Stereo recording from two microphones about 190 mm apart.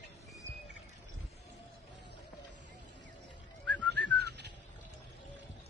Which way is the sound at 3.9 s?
60° right (ahead or behind).